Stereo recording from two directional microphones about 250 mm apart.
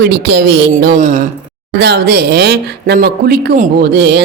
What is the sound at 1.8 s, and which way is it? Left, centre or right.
Speech, right.